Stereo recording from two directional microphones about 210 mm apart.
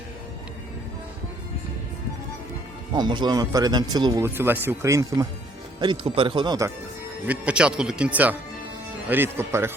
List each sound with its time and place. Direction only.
2.9 s speech: 20° right (ahead or behind)
7.3 s speech: 5° right (ahead or behind)